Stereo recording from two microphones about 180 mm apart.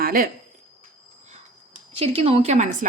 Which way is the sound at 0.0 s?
55° right (ahead or behind).